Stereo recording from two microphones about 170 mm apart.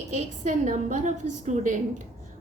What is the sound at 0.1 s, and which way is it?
A woman's voice, 45° right (ahead or behind).